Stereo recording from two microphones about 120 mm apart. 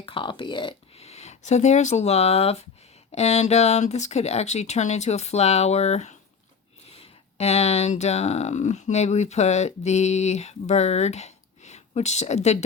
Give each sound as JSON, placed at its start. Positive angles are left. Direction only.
{"t": 0.0, "sound": "speech", "side_deg": 45}
{"t": 1.0, "sound": "speech", "side_deg": 65}